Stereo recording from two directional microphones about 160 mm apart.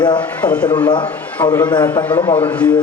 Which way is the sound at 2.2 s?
35° left (ahead or behind).